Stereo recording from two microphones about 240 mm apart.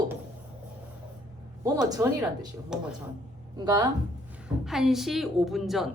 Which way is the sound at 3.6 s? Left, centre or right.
Centre.